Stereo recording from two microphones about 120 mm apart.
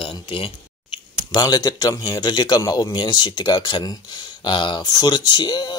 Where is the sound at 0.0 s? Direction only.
45° left (ahead or behind).